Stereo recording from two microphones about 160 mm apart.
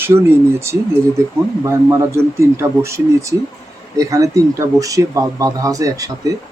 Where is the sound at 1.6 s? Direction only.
15° right (ahead or behind).